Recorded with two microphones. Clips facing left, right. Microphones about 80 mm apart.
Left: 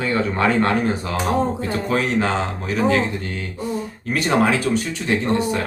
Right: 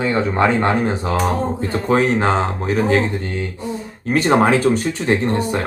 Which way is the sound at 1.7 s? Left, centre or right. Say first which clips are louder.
Right 6 dB; right.